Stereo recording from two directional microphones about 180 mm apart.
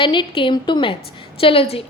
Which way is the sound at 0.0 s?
30° left (ahead or behind).